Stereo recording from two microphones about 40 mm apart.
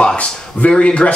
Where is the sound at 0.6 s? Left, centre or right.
Left.